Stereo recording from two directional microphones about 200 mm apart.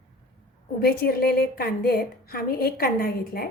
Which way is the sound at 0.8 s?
50° left (ahead or behind).